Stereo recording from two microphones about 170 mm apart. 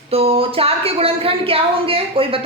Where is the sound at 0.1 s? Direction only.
35° right (ahead or behind).